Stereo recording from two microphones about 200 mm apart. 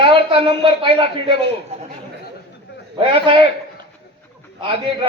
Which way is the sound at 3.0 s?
25° right (ahead or behind).